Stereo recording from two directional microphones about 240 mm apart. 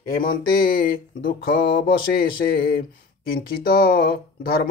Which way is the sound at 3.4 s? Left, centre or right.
Left.